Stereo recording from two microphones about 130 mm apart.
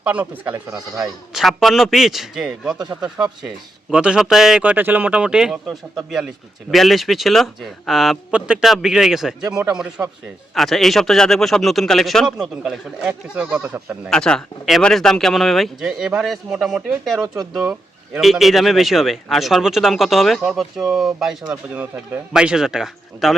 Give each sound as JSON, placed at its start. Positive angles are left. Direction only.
{"t": 0.0, "sound": "speech", "side_deg": -10}
{"t": 1.3, "sound": "speech", "side_deg": 0}
{"t": 2.7, "sound": "speech", "side_deg": -30}
{"t": 3.0, "sound": "speech", "side_deg": -5}
{"t": 14.1, "sound": "speech", "side_deg": 5}